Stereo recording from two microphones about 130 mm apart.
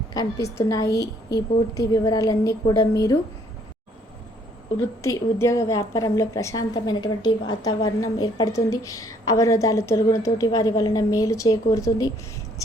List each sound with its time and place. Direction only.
0.1 s a woman's voice: 25° left (ahead or behind)
5.0 s a woman's voice: 25° left (ahead or behind)